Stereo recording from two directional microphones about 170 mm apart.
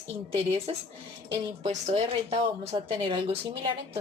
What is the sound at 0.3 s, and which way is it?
A woman's voice, 35° right (ahead or behind).